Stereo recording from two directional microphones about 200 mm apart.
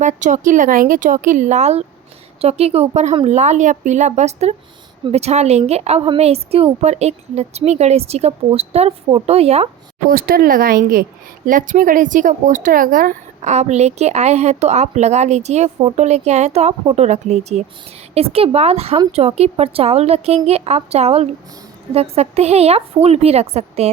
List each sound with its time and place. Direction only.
0.0 s a woman's voice: 40° right (ahead or behind)
10.1 s a woman's voice: 45° right (ahead or behind)